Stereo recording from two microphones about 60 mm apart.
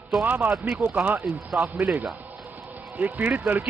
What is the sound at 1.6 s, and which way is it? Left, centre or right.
Speech, centre.